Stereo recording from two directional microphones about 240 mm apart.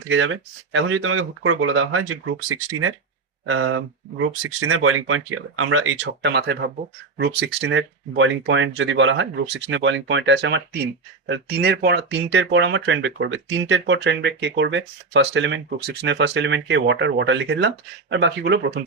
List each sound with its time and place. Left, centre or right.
0.1 s speech: right
3.4 s speech: right